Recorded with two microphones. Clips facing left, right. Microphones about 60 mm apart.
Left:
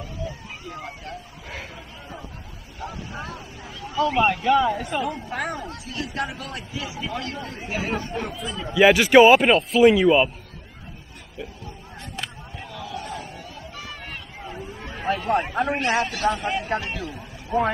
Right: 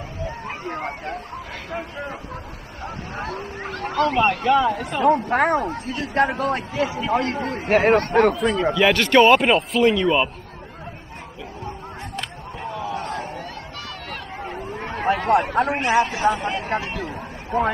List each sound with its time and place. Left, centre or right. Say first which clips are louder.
0.5 s hubbub: right 7 dB; right
1.7 s a man's voice: right 10 dB; right
2.8 s speech: right 3 dB; right
4.1 s a man's voice: even; centre
5.0 s a man's voice: right 11 dB; right
8.7 s a man's voice: left 4 dB; centre
12.6 s a sound: right 6 dB; right
14.4 s chatter: right 5 dB; right
15.1 s speech: right 4 dB; right
15.8 s speech: right 5 dB; right
17.5 s a man's voice: right 1 dB; right